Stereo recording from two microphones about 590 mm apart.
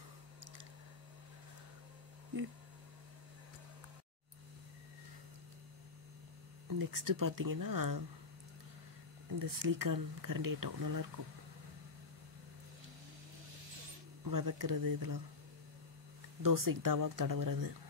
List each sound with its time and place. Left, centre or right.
6.8 s speech: right
9.4 s speech: right
14.2 s speech: right
16.4 s speech: right